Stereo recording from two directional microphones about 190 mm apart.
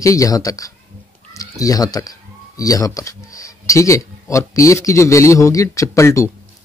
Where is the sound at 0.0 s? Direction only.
15° left (ahead or behind).